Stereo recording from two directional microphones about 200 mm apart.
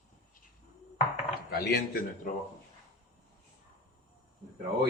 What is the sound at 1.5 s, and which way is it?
Speech, 50° left (ahead or behind).